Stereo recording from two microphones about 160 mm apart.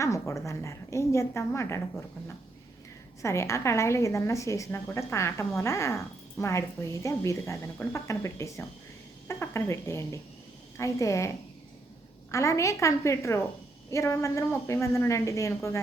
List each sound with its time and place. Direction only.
0.0 s a woman's voice: 20° left (ahead or behind)
12.3 s a woman's voice: 20° left (ahead or behind)